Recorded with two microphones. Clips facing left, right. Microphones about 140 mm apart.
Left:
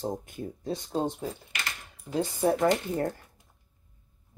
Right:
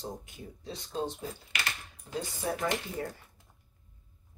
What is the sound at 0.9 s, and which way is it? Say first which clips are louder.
Speech: left 4 dB; 40° left (ahead or behind).